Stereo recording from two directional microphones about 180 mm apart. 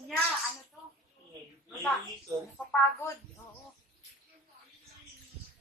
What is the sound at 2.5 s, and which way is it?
Speech, 10° left (ahead or behind).